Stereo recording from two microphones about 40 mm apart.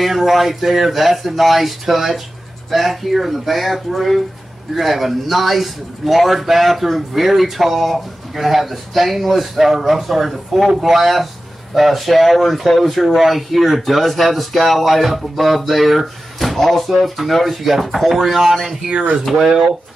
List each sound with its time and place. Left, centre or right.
0.0 s speech: centre
18.9 s speech: right